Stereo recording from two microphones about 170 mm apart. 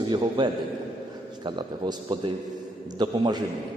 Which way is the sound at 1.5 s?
25° right (ahead or behind).